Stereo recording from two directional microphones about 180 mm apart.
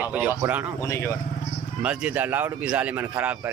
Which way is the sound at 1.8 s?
5° right (ahead or behind).